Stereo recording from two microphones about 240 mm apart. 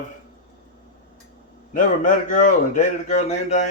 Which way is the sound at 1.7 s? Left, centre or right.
Left.